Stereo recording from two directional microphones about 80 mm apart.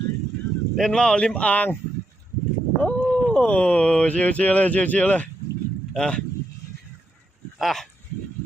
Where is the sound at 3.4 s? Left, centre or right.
Centre.